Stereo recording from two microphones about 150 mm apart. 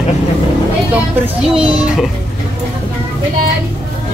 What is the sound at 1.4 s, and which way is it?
Speech, 5° right (ahead or behind).